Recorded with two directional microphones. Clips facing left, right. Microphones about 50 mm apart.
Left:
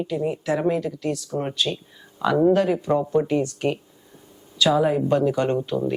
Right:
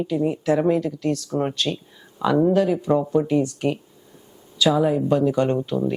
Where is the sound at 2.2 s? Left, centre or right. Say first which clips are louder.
Even; centre.